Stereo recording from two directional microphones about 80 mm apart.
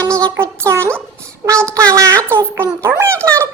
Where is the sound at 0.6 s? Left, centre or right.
Right.